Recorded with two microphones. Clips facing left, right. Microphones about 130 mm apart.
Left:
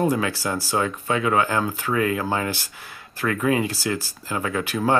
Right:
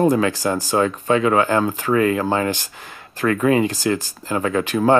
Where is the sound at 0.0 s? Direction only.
45° right (ahead or behind).